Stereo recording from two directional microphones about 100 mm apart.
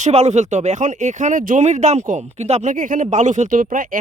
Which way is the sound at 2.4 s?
90° right.